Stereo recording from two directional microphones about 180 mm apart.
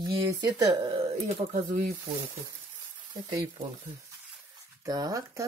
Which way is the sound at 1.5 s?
45° right (ahead or behind).